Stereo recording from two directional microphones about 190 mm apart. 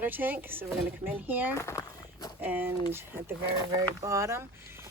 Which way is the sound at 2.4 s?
10° right (ahead or behind).